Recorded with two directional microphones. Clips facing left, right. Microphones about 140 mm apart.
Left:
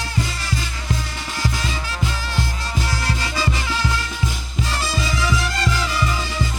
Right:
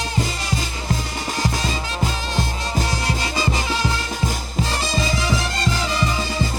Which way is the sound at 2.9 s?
20° right (ahead or behind).